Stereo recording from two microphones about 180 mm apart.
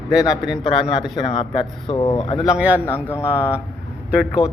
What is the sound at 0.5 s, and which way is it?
Speech, 30° left (ahead or behind).